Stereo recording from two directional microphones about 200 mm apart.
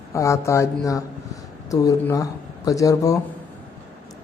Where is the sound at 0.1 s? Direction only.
15° left (ahead or behind).